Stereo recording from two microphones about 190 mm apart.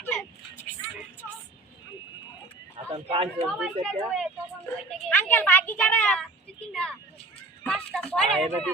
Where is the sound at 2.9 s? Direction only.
30° right (ahead or behind).